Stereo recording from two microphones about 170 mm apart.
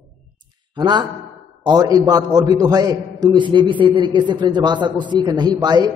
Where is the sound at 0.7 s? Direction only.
25° right (ahead or behind).